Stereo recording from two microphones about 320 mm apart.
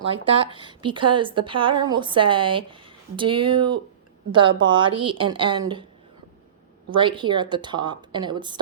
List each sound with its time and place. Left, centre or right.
0.0 s a woman's voice: centre
6.9 s a woman's voice: centre